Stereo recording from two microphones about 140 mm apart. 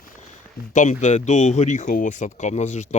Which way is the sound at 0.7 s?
60° left (ahead or behind).